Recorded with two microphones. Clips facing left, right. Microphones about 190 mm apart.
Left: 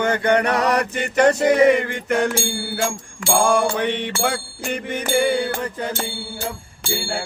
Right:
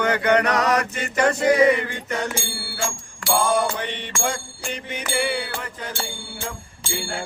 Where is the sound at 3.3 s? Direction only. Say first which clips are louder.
Left 3 dB; 55° left (ahead or behind).